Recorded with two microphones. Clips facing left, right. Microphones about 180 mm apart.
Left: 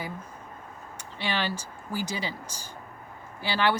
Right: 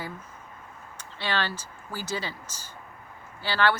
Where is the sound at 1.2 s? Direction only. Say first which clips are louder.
Even; 15° left (ahead or behind).